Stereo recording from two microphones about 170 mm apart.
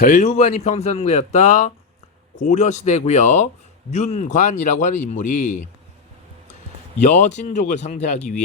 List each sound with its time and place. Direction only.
0.0 s speech: 45° left (ahead or behind)
7.0 s speech: 45° left (ahead or behind)